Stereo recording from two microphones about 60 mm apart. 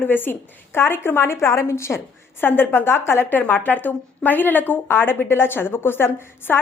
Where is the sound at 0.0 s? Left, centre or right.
Left.